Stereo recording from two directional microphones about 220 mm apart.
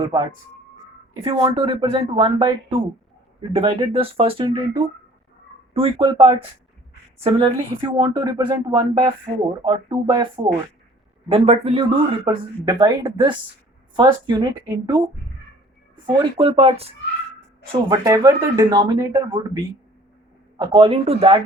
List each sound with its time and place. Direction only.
0.0 s speech: 20° right (ahead or behind)
3.5 s speech: 25° right (ahead or behind)
20.6 s speech: 20° right (ahead or behind)